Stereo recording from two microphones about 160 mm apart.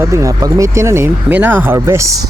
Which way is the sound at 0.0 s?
20° right (ahead or behind).